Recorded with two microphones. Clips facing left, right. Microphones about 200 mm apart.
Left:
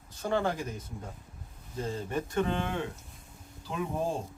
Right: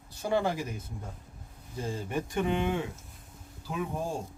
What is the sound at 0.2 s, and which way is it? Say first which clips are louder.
Speech: right 1 dB; 10° right (ahead or behind).